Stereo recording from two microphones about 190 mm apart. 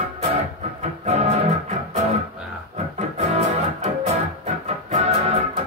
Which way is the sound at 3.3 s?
35° right (ahead or behind).